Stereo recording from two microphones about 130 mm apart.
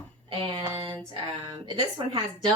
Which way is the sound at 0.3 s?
40° right (ahead or behind).